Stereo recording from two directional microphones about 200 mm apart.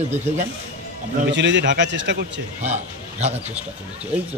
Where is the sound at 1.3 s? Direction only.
65° right (ahead or behind).